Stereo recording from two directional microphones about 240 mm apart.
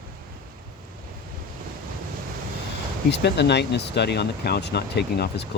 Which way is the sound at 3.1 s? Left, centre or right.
Left.